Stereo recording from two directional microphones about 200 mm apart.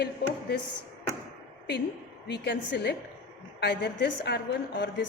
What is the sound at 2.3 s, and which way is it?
A woman's voice, 55° left (ahead or behind).